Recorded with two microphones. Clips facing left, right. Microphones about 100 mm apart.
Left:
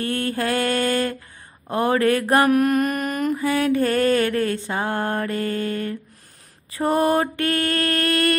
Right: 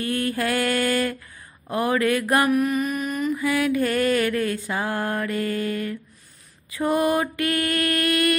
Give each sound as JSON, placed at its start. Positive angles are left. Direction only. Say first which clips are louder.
{"t": 0.0, "sound": "mantra", "louder": "left 1 dB", "side_deg": 35}
{"t": 2.4, "sound": "mantra", "louder": "left 3 dB", "side_deg": 50}
{"t": 3.3, "sound": "mantra", "louder": "left 2 dB", "side_deg": 30}